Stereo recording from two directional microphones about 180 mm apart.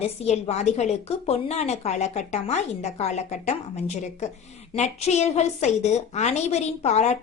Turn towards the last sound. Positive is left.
turn(degrees=40)  # may be behind; listen again after turning